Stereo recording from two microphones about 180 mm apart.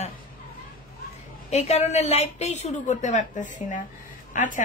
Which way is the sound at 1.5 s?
35° left (ahead or behind).